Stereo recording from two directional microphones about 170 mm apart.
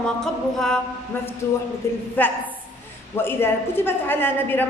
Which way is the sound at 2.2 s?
10° left (ahead or behind).